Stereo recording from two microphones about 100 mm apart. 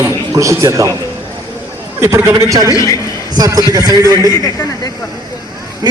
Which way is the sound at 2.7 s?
35° left (ahead or behind).